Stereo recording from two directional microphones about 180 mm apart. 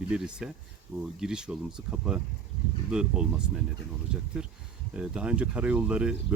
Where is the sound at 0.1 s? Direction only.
5° right (ahead or behind).